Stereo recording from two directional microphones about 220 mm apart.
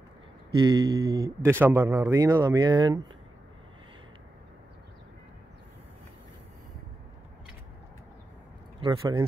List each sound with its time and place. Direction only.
0.6 s speech: 20° right (ahead or behind)
8.8 s speech: 20° right (ahead or behind)